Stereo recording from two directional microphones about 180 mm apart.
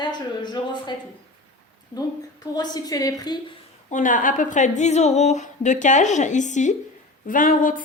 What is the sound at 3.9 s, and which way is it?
A woman's voice, 45° left (ahead or behind).